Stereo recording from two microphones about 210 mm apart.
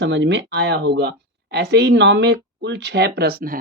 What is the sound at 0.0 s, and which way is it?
A woman's voice, 55° right (ahead or behind).